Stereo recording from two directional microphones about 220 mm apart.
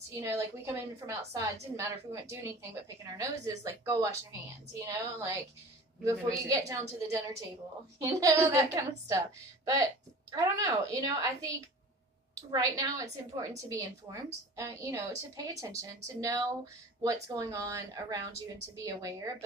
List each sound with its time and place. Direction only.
0.2 s a woman's voice: 15° right (ahead or behind)
6.3 s a woman's voice: 15° right (ahead or behind)